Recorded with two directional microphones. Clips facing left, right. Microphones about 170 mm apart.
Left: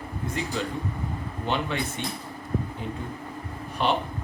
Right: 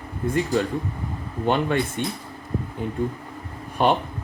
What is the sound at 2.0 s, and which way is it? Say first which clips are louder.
Speech: right 6 dB; 50° right (ahead or behind).